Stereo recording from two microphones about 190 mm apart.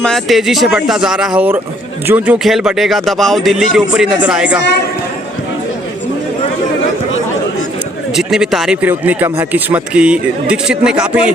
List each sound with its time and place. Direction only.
0.0 s speech: centre (ahead or behind)
8.1 s speech: centre (ahead or behind)